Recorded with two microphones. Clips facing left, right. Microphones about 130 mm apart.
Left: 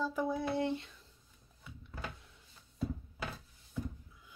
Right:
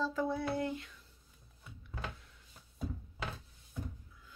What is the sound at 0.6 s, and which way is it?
Speech, 25° left (ahead or behind).